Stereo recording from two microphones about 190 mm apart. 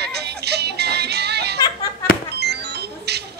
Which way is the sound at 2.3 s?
60° right (ahead or behind).